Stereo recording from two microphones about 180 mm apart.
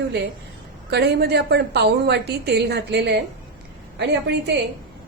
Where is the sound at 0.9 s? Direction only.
65° right (ahead or behind).